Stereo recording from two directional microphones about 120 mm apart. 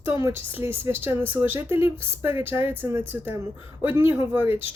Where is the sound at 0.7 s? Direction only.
20° right (ahead or behind).